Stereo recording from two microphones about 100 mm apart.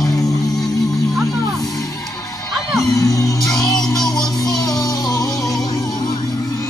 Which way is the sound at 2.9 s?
40° left (ahead or behind).